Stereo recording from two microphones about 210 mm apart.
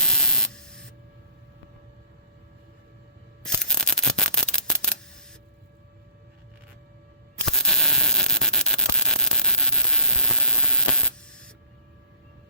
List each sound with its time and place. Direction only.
0.0 s hum: 5° left (ahead or behind)
3.4 s a sound: 5° left (ahead or behind)
7.4 s static: centre (ahead or behind)